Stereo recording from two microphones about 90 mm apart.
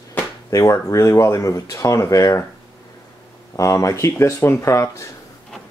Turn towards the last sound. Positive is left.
turn(degrees=35)  # may be behind; listen again after turning